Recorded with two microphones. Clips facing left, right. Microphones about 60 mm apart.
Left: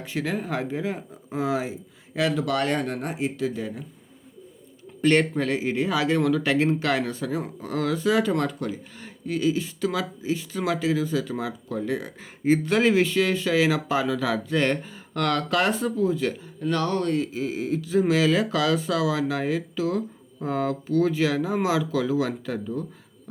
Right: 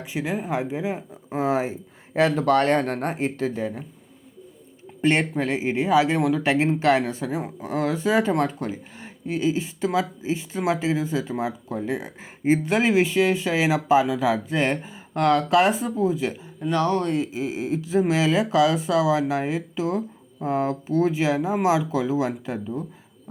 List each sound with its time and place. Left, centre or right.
0.0 s speech: centre
1.4 s speech: right
4.9 s a man's voice: right